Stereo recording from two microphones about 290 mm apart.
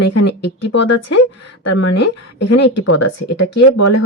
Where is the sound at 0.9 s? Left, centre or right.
Left.